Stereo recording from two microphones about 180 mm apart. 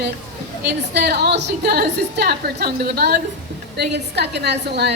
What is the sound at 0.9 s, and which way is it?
A woman's voice, 65° right (ahead or behind).